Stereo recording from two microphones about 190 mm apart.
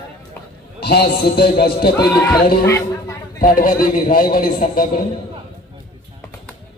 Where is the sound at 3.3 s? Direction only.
50° left (ahead or behind).